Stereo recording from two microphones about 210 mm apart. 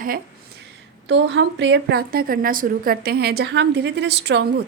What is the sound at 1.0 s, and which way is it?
A woman's voice, 60° right (ahead or behind).